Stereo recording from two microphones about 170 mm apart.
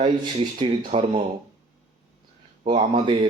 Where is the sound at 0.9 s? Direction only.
35° right (ahead or behind).